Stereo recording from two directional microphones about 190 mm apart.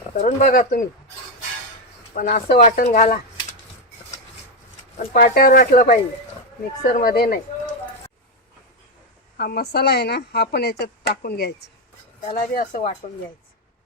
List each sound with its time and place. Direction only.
0.2 s speech: 40° left (ahead or behind)
2.1 s speech: 45° left (ahead or behind)
5.1 s speech: 50° left (ahead or behind)
9.4 s speech: 55° left (ahead or behind)
12.2 s speech: 40° left (ahead or behind)